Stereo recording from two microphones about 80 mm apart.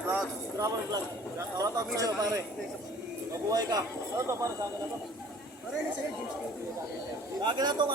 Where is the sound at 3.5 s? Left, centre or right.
Right.